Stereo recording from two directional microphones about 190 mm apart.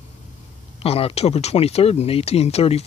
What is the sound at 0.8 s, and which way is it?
Speech, 30° left (ahead or behind).